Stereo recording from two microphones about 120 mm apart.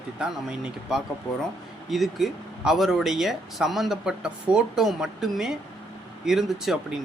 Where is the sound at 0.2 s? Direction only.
5° right (ahead or behind).